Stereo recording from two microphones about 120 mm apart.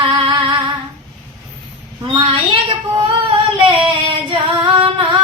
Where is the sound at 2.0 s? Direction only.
50° right (ahead or behind).